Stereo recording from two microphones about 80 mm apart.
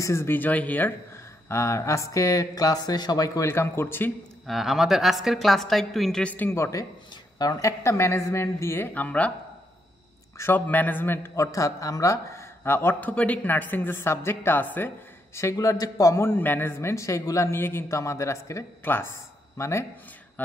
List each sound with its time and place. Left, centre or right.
0.0 s a woman's voice: left
1.1 s speech: left
3.3 s a woman's voice: left
4.5 s a woman's voice: centre
6.2 s a woman's voice: left
6.5 s a man's voice: left; by 9.3 s centre
10.3 s a man's voice: left
10.7 s a woman's voice: left
11.3 s a man's voice: left
13.1 s a woman's voice: centre
15.3 s speech: left
16.3 s a man's voice: left
18.9 s a woman's voice: left
20.4 s a woman's voice: left